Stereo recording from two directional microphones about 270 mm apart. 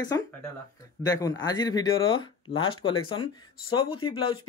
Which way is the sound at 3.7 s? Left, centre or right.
Centre.